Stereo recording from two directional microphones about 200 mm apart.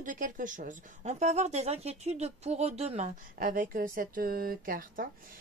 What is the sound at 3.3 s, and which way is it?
Speech, 45° right (ahead or behind).